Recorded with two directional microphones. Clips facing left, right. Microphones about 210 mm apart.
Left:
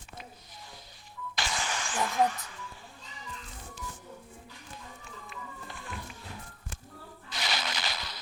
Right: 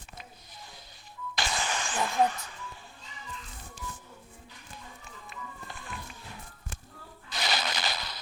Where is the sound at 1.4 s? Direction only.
35° right (ahead or behind).